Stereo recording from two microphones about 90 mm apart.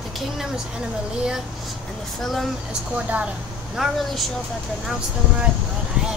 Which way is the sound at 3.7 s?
5° right (ahead or behind).